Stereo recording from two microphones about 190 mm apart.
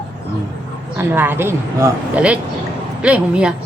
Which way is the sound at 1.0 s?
10° right (ahead or behind).